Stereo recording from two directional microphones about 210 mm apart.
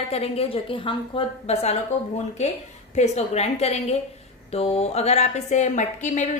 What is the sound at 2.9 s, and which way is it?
A woman's voice, 30° left (ahead or behind).